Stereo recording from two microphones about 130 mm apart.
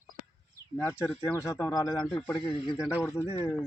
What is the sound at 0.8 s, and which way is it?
Speech, 20° left (ahead or behind).